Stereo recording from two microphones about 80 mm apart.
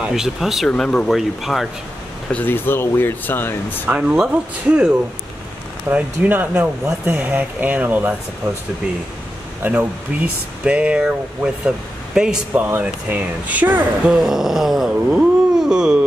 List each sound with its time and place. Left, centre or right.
0.0 s a sound: centre
0.7 s speech: centre
1.1 s a sound: centre
2.2 s speech: left
3.8 s speech: centre
5.9 s speech: right
9.6 s speech: centre
12.5 s speech: right
14.1 s a sound: centre